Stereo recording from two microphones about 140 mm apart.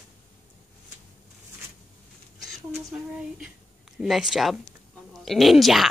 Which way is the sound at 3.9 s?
Centre (ahead or behind).